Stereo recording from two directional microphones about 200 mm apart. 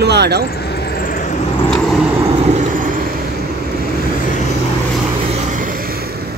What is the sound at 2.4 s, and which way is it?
Vehicle, 40° right (ahead or behind).